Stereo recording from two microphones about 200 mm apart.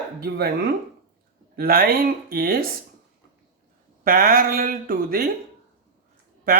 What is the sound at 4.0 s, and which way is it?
Speech, 45° right (ahead or behind).